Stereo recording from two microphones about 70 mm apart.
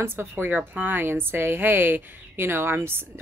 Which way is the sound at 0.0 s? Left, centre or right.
Right.